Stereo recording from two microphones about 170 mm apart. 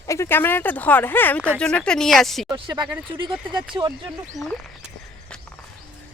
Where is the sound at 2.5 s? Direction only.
25° right (ahead or behind).